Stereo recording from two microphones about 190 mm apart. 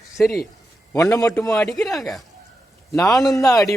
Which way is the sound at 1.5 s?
Centre (ahead or behind).